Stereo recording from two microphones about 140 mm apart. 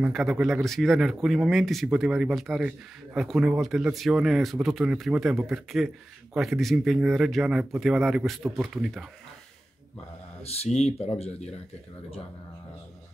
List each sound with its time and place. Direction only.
0.0 s speech: 5° right (ahead or behind)
10.4 s speech: 50° left (ahead or behind)